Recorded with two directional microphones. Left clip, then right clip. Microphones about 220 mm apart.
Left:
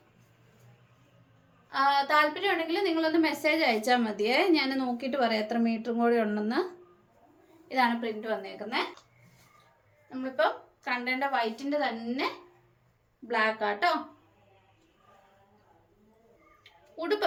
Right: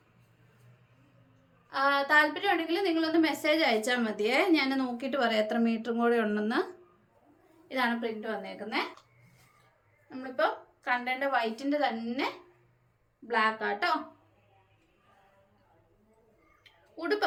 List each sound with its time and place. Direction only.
1.7 s a woman's voice: 15° right (ahead or behind)
7.7 s a woman's voice: 15° right (ahead or behind)
10.8 s a woman's voice: 15° right (ahead or behind)
16.6 s a sound: 10° right (ahead or behind)